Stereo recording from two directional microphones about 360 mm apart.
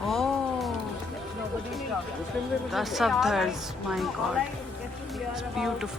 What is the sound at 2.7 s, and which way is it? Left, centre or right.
A woman's voice, centre.